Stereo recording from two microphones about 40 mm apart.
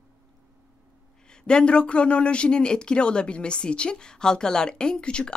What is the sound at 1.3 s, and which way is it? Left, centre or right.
A woman's voice, left.